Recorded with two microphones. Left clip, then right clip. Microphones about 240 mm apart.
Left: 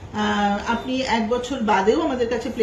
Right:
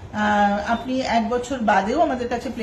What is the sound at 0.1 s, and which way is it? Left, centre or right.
A woman's voice, right.